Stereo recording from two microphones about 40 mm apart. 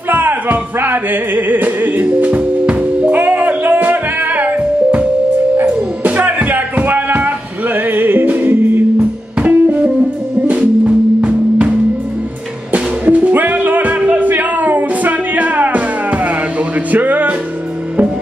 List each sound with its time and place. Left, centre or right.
0.1 s music: right
2.6 s music: right
3.1 s music: right
9.4 s music: right
12.7 s music: right